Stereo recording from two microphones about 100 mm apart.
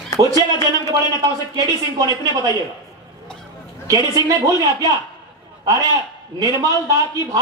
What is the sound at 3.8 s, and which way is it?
A man's voice, 35° right (ahead or behind).